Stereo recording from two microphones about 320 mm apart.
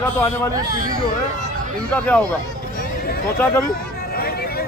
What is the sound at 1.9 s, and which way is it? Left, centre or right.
Speech, centre.